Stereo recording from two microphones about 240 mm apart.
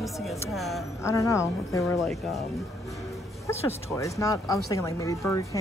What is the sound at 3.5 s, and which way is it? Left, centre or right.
Speech, centre.